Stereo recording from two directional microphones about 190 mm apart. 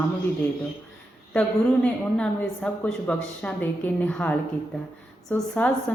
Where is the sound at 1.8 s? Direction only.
5° left (ahead or behind).